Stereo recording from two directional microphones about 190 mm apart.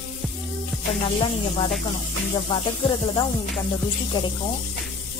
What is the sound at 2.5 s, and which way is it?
Speech, 25° left (ahead or behind).